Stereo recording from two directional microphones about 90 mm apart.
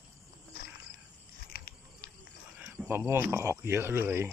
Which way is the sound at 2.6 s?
20° right (ahead or behind).